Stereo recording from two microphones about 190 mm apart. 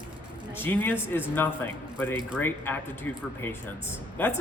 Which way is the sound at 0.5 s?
10° left (ahead or behind).